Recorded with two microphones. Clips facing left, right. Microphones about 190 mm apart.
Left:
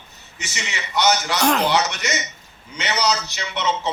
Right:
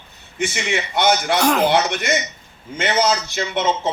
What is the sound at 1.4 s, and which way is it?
Speech, 5° right (ahead or behind).